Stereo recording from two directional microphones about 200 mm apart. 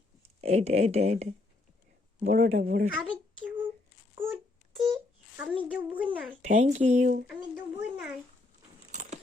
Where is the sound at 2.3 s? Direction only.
40° right (ahead or behind).